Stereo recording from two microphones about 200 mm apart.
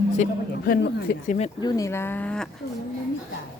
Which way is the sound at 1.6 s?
15° left (ahead or behind).